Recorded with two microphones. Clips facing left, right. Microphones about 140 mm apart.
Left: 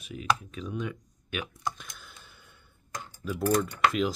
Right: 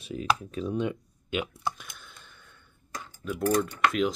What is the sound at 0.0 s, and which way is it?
Speech, 35° right (ahead or behind).